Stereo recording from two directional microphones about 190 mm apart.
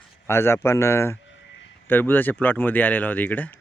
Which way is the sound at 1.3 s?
75° left (ahead or behind).